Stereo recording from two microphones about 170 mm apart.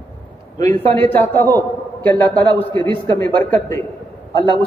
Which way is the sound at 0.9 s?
10° left (ahead or behind).